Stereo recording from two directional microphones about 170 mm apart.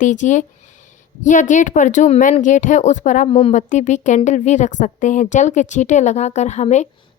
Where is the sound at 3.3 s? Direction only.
35° left (ahead or behind).